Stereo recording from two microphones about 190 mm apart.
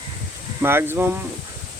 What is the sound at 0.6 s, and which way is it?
Speech, 10° right (ahead or behind).